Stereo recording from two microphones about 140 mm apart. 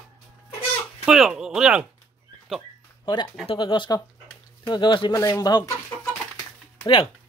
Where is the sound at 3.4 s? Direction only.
35° left (ahead or behind).